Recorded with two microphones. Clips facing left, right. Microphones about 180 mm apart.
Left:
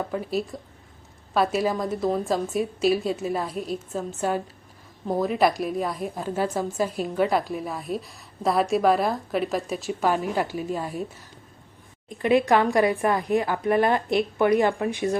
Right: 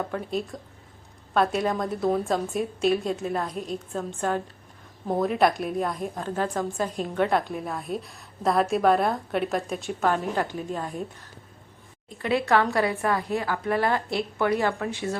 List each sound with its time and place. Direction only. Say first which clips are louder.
0.1 s a woman's voice: left 2 dB; 5° left (ahead or behind)